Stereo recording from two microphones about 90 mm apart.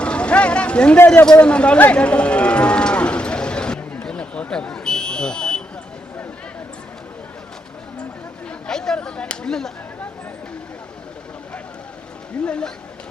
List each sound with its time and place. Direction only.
0.0 s vehicle: 10° left (ahead or behind)
0.9 s a man's voice: 25° left (ahead or behind)
1.2 s cattle: 10° left (ahead or behind)
8.4 s speech: 10° left (ahead or behind)
12.5 s speech: 10° left (ahead or behind)